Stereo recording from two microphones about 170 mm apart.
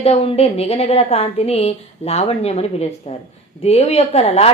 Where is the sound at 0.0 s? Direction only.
35° left (ahead or behind).